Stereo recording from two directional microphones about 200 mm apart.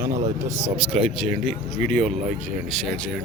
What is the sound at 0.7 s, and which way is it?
A man's voice, 5° right (ahead or behind).